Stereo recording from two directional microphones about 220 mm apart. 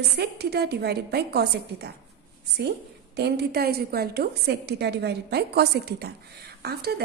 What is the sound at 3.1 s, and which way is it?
A woman's voice, 50° right (ahead or behind).